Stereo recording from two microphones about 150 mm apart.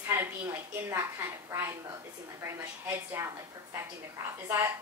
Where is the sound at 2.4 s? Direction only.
15° right (ahead or behind).